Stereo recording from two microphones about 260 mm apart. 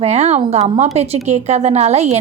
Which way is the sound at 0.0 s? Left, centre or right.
Right.